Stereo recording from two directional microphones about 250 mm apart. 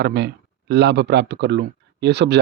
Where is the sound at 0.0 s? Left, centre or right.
Right.